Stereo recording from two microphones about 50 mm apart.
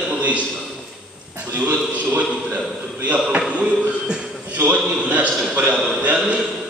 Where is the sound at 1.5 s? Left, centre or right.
Right.